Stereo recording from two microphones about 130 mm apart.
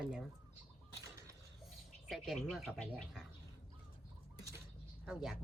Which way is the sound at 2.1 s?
Centre (ahead or behind).